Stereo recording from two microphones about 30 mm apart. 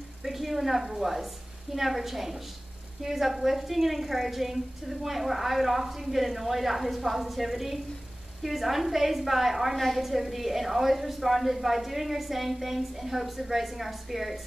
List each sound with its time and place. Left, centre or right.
0.2 s a woman's voice: centre